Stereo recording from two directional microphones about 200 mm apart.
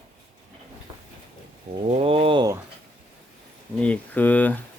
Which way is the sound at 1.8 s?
30° right (ahead or behind).